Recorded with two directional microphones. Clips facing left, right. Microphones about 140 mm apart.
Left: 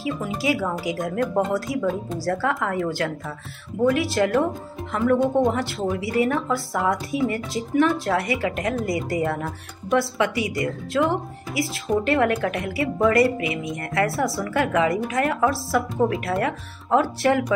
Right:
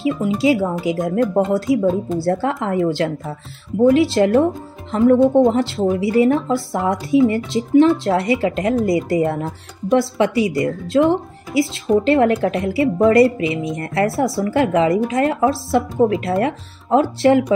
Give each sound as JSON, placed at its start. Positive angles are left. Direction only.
{"t": 0.0, "sound": "a woman's voice", "side_deg": -25}